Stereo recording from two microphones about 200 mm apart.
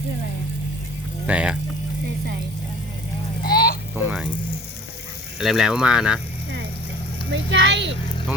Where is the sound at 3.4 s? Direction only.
50° left (ahead or behind).